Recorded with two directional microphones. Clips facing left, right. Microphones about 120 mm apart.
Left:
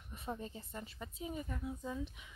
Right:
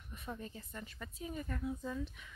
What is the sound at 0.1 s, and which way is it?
Speech, 30° left (ahead or behind).